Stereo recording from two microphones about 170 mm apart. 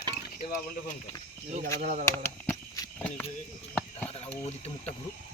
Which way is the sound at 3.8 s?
10° left (ahead or behind).